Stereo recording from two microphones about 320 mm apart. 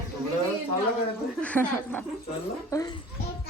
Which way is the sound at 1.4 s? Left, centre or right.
Centre.